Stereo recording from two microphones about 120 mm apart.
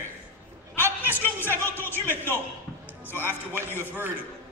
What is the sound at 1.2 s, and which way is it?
A man's voice, 15° left (ahead or behind).